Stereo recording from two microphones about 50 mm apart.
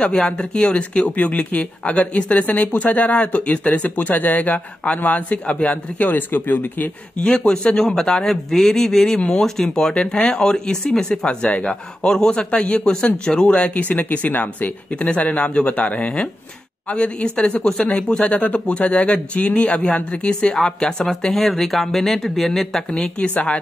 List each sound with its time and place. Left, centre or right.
0.0 s speech: centre; by 6.9 s left
7.2 s a man's voice: centre
13.6 s a man's voice: left; by 23.1 s centre
23.1 s speech: left